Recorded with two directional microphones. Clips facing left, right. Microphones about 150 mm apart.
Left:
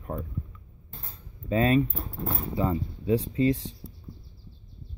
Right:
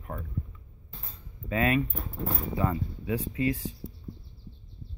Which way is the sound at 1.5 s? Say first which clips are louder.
Left 4 dB; 30° left (ahead or behind).